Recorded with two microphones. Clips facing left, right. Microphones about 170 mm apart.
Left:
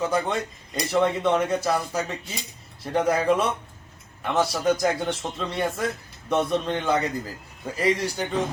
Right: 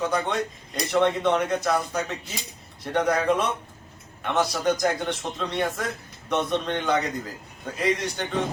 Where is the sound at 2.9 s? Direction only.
5° left (ahead or behind).